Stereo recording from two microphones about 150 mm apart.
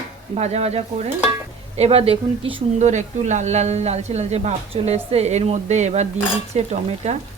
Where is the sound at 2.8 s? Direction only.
55° right (ahead or behind).